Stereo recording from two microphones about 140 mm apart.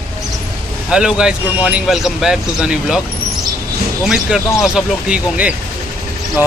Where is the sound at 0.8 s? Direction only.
5° right (ahead or behind).